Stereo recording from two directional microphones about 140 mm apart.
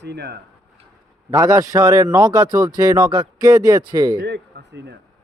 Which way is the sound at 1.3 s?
25° right (ahead or behind).